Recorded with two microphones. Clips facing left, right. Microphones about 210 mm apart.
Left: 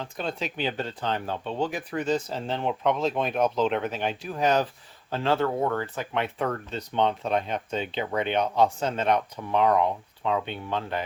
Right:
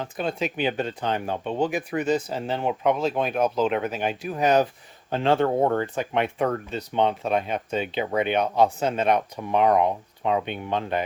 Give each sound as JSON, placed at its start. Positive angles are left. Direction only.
{"t": 0.2, "sound": "speech", "side_deg": -10}